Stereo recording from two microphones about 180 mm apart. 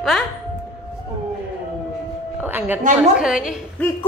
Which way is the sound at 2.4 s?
10° right (ahead or behind).